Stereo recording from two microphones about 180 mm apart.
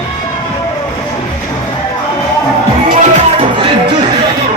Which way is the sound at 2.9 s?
45° right (ahead or behind).